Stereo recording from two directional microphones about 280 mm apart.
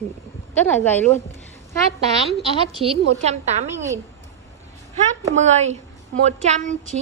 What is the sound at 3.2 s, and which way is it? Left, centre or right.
Speech, right.